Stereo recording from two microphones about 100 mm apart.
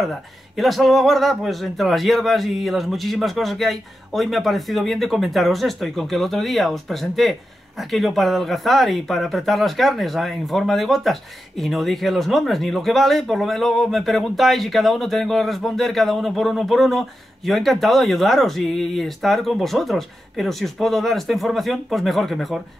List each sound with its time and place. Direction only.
0.0 s speech: centre (ahead or behind)